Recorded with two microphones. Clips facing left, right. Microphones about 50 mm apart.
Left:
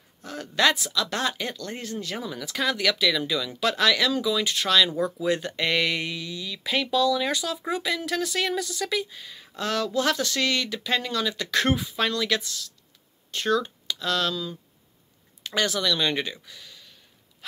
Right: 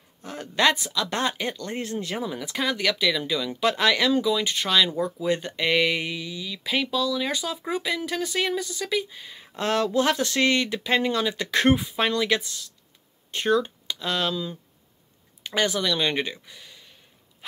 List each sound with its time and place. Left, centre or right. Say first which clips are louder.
0.2 s speech: even; centre
9.6 s speech: right 3 dB; right